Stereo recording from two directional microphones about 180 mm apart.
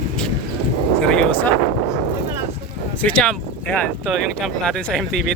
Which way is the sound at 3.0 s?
5° left (ahead or behind).